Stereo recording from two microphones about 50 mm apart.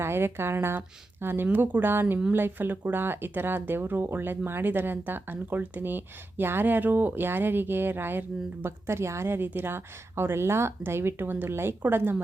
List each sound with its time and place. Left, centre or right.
0.0 s speech: right
1.5 s speech: right
1.9 s speech: right
8.6 s speech: right